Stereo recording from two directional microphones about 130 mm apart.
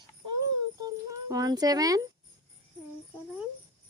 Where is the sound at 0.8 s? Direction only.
25° right (ahead or behind).